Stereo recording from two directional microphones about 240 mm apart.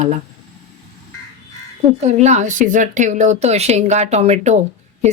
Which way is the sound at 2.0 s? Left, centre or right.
Right.